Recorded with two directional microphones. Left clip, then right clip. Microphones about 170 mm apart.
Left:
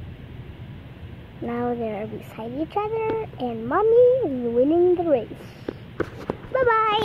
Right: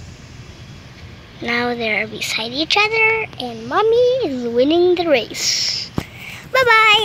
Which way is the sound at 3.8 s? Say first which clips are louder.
Right 2 dB; 25° right (ahead or behind).